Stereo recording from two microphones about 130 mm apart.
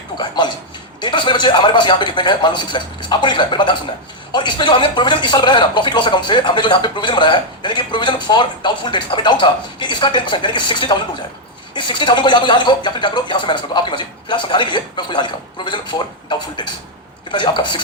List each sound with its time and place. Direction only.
0.2 s speech: 35° left (ahead or behind)